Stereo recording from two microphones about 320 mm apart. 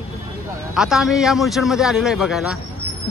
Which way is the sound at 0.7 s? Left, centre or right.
Centre.